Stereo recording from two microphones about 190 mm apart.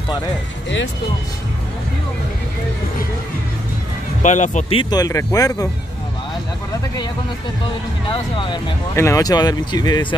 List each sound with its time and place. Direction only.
4.2 s speech: 40° left (ahead or behind); by 5.7 s 15° left (ahead or behind)
8.1 s speech: 25° left (ahead or behind)
8.9 s speech: 15° left (ahead or behind)